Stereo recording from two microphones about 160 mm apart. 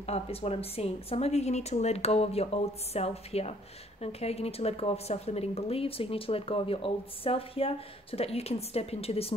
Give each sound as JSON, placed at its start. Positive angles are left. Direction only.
{"t": 0.0, "sound": "speech", "side_deg": 40}